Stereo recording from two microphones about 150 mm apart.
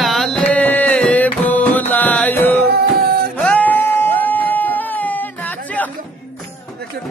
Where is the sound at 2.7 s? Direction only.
90° right.